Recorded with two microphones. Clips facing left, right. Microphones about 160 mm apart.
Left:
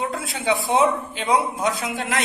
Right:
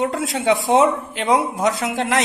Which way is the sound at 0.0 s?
80° right.